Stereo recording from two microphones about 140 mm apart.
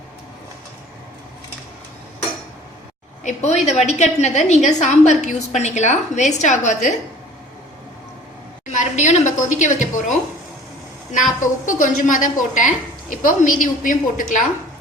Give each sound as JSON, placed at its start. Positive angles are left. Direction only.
{"t": 3.2, "sound": "a woman's voice", "side_deg": 55}
{"t": 8.7, "sound": "a woman's voice", "side_deg": 60}
{"t": 11.3, "sound": "a woman's voice", "side_deg": 65}